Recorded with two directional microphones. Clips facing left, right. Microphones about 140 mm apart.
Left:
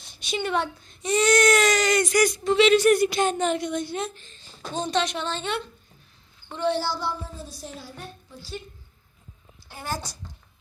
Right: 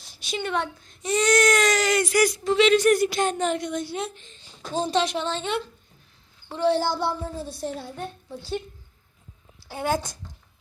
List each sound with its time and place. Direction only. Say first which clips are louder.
0.0 s speech: left 1 dB; centre (ahead or behind)
3.9 s speech: even; 15° right (ahead or behind)
4.8 s a woman's voice: right 2 dB; 25° right (ahead or behind)
6.5 s a woman's voice: right 3 dB; 35° right (ahead or behind)
6.7 s a woman's voice: right 3 dB; 50° right (ahead or behind)
9.6 s a woman's voice: right 7 dB; 65° right (ahead or behind)